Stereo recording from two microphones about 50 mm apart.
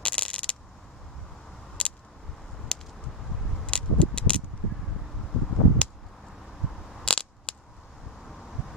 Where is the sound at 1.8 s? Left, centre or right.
Left.